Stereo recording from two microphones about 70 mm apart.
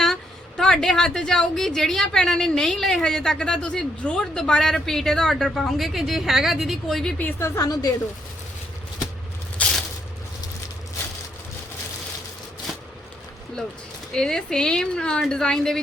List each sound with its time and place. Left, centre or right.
0.0 s a woman's voice: centre
7.2 s a woman's voice: left
7.4 s a woman's voice: left
9.6 s a sound: left
12.7 s a sound: centre
14.1 s a woman's voice: centre